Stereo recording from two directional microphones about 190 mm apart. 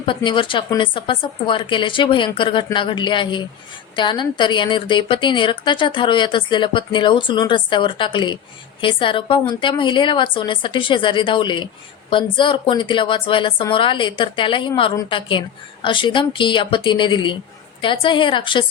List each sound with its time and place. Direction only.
0.0 s a woman's voice: 25° left (ahead or behind)